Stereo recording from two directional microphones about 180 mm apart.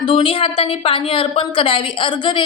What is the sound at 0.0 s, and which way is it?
A woman's voice, 30° left (ahead or behind).